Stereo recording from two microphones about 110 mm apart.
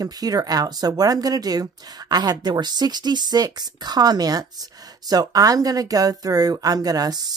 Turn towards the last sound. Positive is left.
turn(degrees=-40)  # may be behind; listen again after turning